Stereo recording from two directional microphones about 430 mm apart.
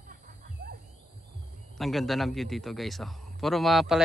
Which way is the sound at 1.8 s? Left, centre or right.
Centre.